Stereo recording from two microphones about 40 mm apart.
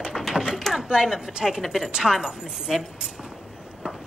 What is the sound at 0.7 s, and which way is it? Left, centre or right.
A woman's voice, centre.